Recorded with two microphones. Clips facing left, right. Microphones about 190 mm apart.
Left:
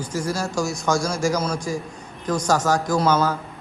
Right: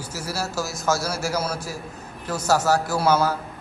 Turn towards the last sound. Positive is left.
turn(degrees=-10)  # may be behind; listen again after turning